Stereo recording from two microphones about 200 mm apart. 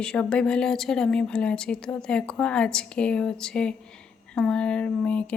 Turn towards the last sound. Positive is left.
turn(degrees=5)  # may be behind; listen again after turning